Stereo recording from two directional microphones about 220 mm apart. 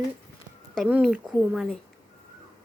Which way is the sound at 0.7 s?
5° right (ahead or behind).